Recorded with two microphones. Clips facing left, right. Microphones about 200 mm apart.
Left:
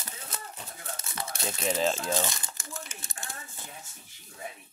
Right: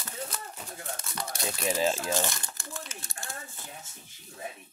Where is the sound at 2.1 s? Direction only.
20° left (ahead or behind).